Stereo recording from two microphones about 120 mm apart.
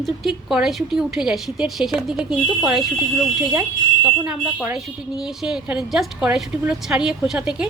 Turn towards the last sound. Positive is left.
turn(degrees=-5)  # may be behind; listen again after turning